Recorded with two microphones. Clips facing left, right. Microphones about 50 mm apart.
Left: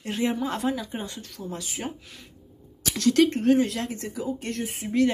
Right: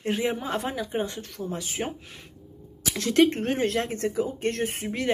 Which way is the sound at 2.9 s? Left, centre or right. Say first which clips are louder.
Even; right.